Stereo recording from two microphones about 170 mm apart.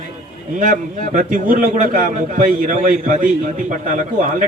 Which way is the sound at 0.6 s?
50° right (ahead or behind).